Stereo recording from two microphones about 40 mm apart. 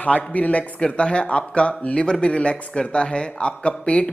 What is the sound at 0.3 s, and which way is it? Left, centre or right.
Speech, left.